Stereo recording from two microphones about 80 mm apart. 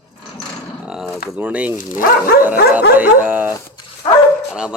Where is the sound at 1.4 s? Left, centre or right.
Centre.